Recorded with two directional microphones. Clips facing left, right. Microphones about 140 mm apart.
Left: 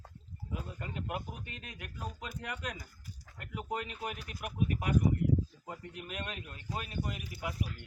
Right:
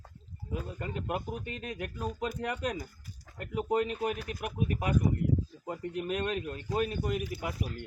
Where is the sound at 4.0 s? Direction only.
50° right (ahead or behind).